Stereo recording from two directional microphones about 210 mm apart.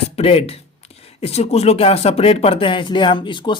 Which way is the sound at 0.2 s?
30° left (ahead or behind).